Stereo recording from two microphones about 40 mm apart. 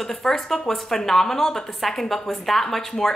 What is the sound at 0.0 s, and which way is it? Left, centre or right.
Speech, centre.